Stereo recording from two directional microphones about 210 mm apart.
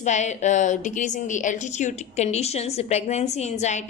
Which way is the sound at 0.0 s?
35° left (ahead or behind).